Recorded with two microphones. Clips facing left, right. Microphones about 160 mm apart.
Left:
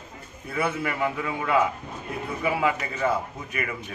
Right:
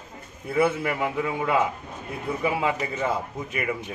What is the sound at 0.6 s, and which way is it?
Speech, 20° right (ahead or behind).